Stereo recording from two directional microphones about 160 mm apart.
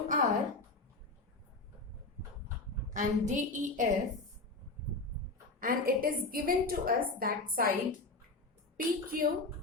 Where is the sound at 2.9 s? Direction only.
50° right (ahead or behind).